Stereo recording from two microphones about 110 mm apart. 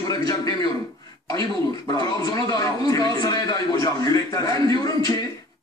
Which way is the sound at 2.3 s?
35° left (ahead or behind).